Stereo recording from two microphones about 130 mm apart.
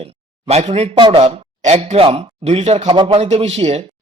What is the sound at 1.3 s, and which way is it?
A man's voice, 55° right (ahead or behind).